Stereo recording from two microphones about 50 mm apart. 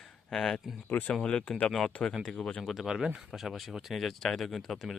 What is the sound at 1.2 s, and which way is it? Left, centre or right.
Speech, centre.